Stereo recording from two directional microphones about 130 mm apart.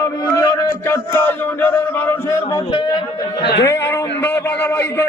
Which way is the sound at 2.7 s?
40° left (ahead or behind).